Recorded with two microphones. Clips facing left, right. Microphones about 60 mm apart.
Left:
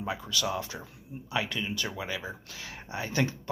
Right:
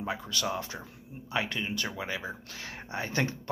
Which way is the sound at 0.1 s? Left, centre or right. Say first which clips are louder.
Left 1 dB; right.